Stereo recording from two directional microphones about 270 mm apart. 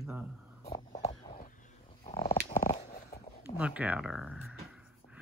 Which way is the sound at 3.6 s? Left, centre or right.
Centre.